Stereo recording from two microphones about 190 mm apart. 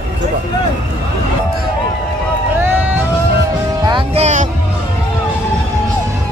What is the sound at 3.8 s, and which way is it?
Music, 30° right (ahead or behind).